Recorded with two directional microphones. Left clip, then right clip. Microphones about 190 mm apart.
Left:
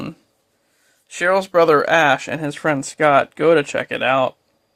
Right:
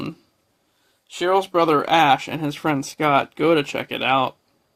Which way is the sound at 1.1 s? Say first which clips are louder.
Left 3 dB; 35° left (ahead or behind).